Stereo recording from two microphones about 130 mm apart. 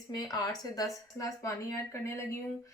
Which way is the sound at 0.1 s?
30° left (ahead or behind).